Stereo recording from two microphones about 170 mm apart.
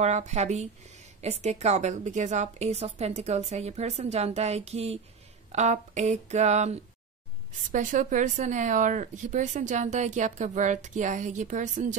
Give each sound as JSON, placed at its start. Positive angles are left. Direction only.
{"t": 0.0, "sound": "a woman's voice", "side_deg": -40}